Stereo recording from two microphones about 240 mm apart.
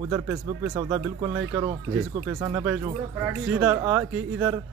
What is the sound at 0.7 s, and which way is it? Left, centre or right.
Speech, centre.